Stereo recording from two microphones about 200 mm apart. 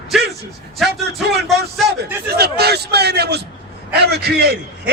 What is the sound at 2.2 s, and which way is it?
A man's voice, 50° right (ahead or behind).